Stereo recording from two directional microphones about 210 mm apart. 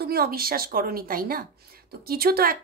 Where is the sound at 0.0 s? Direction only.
45° right (ahead or behind).